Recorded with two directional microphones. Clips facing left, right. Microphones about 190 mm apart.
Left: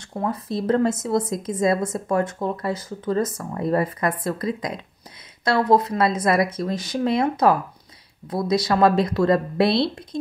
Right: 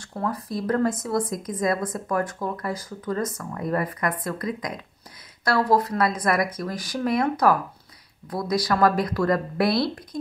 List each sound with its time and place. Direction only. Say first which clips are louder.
0.1 s a woman's voice: left 2 dB; 20° left (ahead or behind)